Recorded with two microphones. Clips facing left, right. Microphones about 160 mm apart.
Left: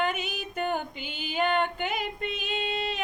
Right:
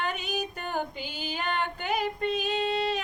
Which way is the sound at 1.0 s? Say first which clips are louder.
Right 1 dB; 40° right (ahead or behind).